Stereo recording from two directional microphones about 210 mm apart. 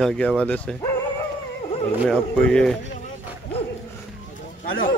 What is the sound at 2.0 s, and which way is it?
Speech, 5° left (ahead or behind).